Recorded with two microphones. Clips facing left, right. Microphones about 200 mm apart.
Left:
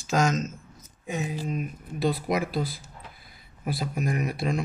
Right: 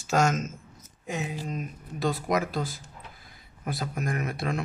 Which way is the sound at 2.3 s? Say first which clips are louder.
Even; 45° right (ahead or behind).